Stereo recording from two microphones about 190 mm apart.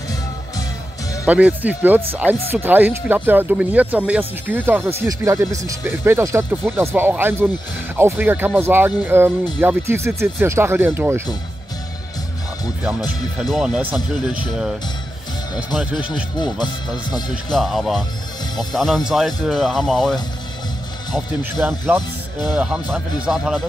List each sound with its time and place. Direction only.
1.2 s speech: 10° right (ahead or behind)
13.4 s speech: centre (ahead or behind)
15.7 s speech: 5° right (ahead or behind)
16.3 s speech: 20° left (ahead or behind)
17.5 s speech: centre (ahead or behind)
21.6 s speech: 10° right (ahead or behind)